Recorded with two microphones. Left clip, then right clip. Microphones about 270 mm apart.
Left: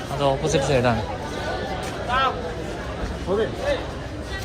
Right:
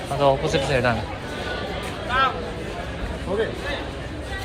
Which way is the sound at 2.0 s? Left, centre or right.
Left.